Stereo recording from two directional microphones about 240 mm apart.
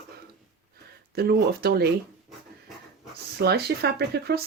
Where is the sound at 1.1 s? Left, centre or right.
Right.